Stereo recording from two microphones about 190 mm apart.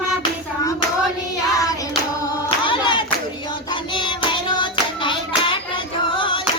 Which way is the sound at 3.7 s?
25° left (ahead or behind).